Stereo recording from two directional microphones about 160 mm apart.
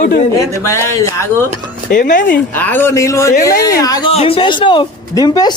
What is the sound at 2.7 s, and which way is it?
Speech, 15° left (ahead or behind).